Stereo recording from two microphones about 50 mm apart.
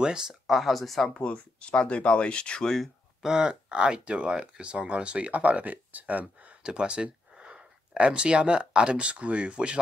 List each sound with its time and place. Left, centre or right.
0.0 s speech: centre
0.3 s speech: centre
1.2 s speech: left
3.2 s speech: centre; by 6.2 s right
6.6 s speech: centre